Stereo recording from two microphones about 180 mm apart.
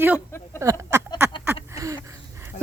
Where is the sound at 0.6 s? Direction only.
15° right (ahead or behind).